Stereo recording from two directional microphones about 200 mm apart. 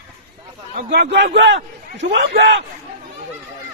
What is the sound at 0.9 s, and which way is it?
A man's voice, 60° right (ahead or behind).